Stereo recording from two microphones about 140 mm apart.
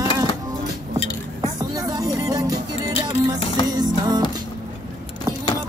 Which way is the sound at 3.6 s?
30° right (ahead or behind).